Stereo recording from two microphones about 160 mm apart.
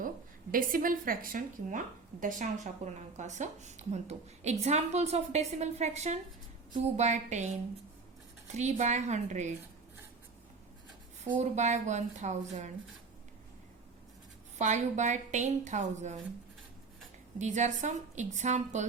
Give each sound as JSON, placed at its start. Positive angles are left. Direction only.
{"t": 0.5, "sound": "a woman's voice", "side_deg": -60}
{"t": 2.2, "sound": "speech", "side_deg": -45}
{"t": 8.5, "sound": "speech", "side_deg": -45}
{"t": 11.3, "sound": "speech", "side_deg": -45}
{"t": 14.6, "sound": "speech", "side_deg": -50}
{"t": 17.3, "sound": "speech", "side_deg": -50}